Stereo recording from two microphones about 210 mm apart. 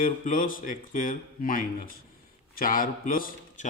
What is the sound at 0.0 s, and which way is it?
A man's voice, 40° left (ahead or behind).